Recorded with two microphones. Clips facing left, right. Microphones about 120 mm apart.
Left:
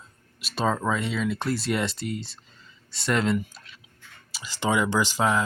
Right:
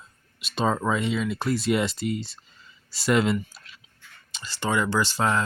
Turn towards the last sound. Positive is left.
turn(degrees=10)  # may be behind; listen again after turning